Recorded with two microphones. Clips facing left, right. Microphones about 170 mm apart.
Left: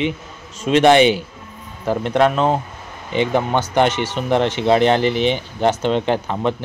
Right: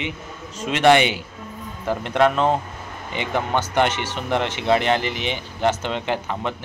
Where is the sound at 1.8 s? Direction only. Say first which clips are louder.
Left 3 dB; 20° left (ahead or behind).